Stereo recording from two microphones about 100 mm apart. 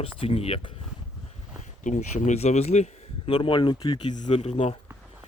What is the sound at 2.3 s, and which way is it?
Speech, 90° left.